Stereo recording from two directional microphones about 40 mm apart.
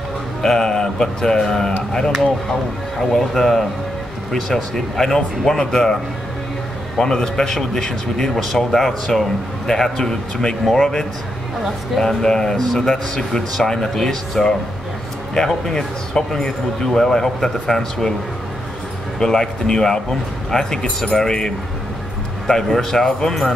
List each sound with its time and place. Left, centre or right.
0.4 s speech: centre
7.0 s speech: centre
19.1 s speech: centre